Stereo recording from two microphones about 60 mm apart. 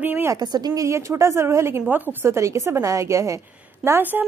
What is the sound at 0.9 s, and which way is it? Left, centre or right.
A woman's voice, right.